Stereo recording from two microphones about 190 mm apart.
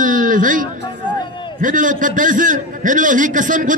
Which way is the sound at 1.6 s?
45° right (ahead or behind).